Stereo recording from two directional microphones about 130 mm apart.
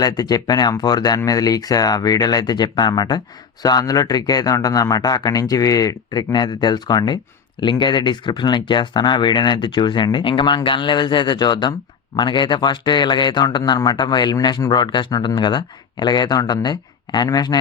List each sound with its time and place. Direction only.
0.0 s a man's voice: 30° left (ahead or behind)